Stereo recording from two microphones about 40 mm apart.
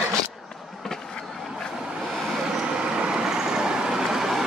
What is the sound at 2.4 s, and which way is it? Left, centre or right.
Vehicle, centre.